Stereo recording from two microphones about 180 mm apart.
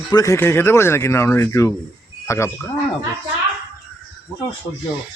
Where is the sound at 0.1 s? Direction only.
15° left (ahead or behind).